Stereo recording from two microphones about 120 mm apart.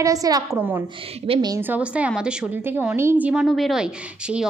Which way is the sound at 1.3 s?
50° right (ahead or behind).